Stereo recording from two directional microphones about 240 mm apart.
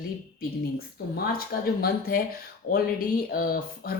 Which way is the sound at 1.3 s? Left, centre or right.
Left.